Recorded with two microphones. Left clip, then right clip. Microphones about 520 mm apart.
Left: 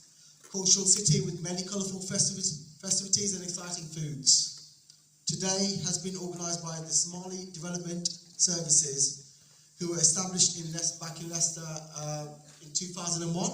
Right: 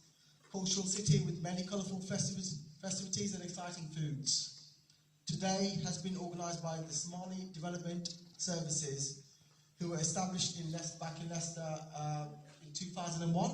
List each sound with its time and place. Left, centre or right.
0.5 s a man's voice: centre